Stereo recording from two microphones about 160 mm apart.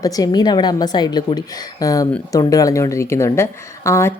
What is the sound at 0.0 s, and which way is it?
A woman's voice, 25° left (ahead or behind).